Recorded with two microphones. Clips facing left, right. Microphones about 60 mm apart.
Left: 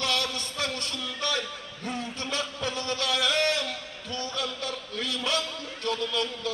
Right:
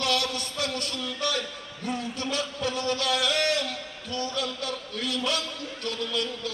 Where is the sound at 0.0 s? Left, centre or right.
Left.